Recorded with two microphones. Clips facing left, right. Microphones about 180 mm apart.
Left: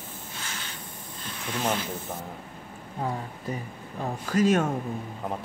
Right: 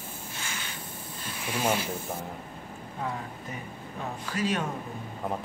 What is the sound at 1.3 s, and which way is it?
Rub, 10° right (ahead or behind).